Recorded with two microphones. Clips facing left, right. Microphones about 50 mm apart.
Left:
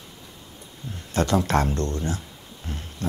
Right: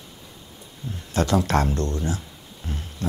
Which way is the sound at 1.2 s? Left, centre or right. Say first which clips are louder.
Even; left.